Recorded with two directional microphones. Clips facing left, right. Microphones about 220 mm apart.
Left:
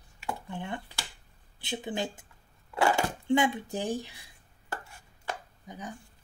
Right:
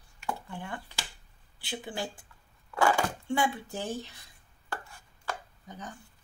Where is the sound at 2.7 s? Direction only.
25° left (ahead or behind).